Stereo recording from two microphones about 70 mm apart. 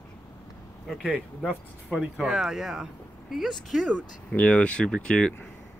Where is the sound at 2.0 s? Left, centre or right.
Centre.